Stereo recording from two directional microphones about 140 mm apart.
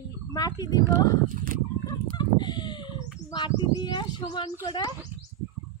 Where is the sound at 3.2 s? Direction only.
30° left (ahead or behind).